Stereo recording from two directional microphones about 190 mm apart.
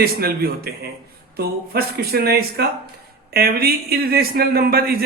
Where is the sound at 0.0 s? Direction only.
50° right (ahead or behind).